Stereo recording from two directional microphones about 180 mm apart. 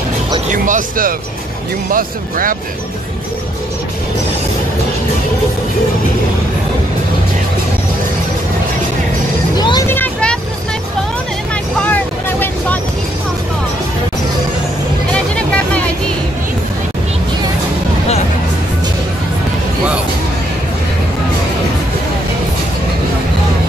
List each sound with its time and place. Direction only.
0.5 s speech: 45° right (ahead or behind)
9.6 s vehicle: 25° left (ahead or behind)
9.8 s vehicle: 10° left (ahead or behind)
11.8 s vehicle: 10° left (ahead or behind)
15.3 s music: 5° left (ahead or behind)